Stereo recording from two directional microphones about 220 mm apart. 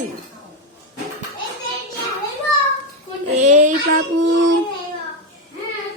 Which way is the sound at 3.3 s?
35° right (ahead or behind).